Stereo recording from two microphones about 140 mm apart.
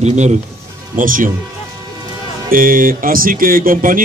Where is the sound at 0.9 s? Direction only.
75° right (ahead or behind).